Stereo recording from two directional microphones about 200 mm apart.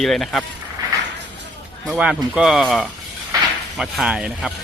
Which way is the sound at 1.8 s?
5° right (ahead or behind).